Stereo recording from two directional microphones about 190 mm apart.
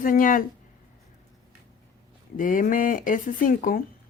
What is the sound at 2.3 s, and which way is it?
Speech, 45° left (ahead or behind).